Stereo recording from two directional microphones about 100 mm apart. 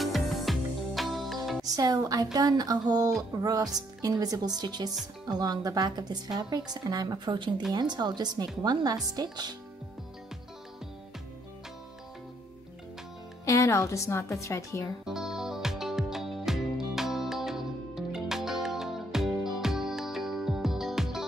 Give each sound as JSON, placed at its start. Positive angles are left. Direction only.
{"t": 0.0, "sound": "music", "side_deg": 0}
{"t": 1.8, "sound": "a woman's voice", "side_deg": -40}
{"t": 7.2, "sound": "speech", "side_deg": -50}
{"t": 13.5, "sound": "a woman's voice", "side_deg": 30}
{"t": 15.0, "sound": "music", "side_deg": -5}